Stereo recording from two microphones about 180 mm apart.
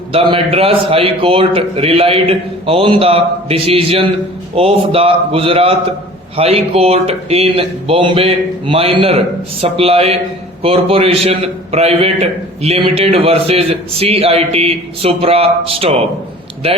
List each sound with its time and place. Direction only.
0.1 s a man's voice: 30° right (ahead or behind)